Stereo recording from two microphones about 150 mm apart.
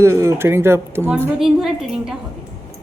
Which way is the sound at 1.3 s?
5° right (ahead or behind).